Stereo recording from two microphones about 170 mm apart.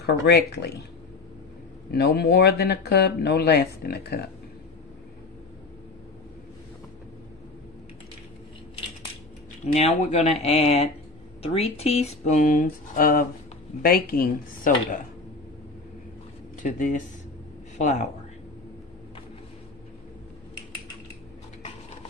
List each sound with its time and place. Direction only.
0.0 s speech: 70° left (ahead or behind)
1.9 s speech: 70° left (ahead or behind)
9.8 s speech: 40° left (ahead or behind); by 15.0 s 60° left (ahead or behind)
16.6 s speech: 50° left (ahead or behind)